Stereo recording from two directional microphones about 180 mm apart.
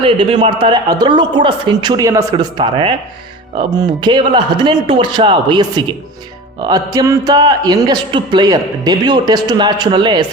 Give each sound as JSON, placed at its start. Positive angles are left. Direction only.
{"t": 0.0, "sound": "a man's voice", "side_deg": -30}